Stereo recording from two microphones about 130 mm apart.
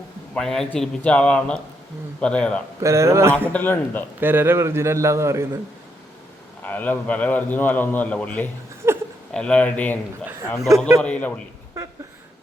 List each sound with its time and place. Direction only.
0.3 s a man's voice: 5° left (ahead or behind)
2.8 s a man's voice: 20° right (ahead or behind)
3.5 s a man's voice: 15° left (ahead or behind)
4.2 s a man's voice: 15° right (ahead or behind)
6.6 s a man's voice: 15° left (ahead or behind)
8.8 s a sound: 20° right (ahead or behind)
9.3 s a man's voice: 5° left (ahead or behind)